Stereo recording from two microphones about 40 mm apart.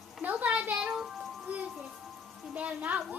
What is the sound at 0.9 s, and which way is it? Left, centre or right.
Music, centre.